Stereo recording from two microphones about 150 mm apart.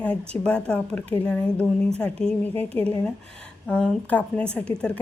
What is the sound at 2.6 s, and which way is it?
Speech, 40° right (ahead or behind).